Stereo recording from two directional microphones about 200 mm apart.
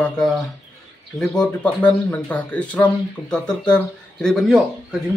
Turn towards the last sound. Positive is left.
turn(degrees=0)  # may be behind; listen again after turning